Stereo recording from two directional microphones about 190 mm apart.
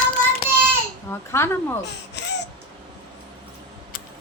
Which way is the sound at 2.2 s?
65° left (ahead or behind).